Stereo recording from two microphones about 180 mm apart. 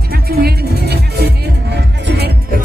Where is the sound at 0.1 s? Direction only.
60° right (ahead or behind).